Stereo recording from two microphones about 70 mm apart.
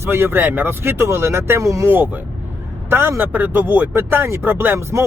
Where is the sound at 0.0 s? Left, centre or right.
Right.